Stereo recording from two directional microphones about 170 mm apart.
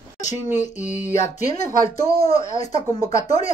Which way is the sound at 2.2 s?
45° left (ahead or behind).